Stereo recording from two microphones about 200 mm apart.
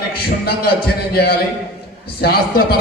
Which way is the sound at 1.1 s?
50° left (ahead or behind).